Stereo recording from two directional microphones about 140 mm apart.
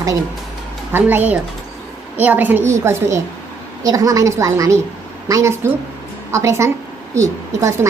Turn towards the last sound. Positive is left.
turn(degrees=-20)  # may be behind; listen again after turning